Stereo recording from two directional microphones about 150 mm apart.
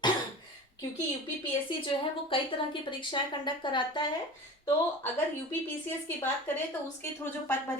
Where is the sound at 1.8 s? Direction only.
35° left (ahead or behind).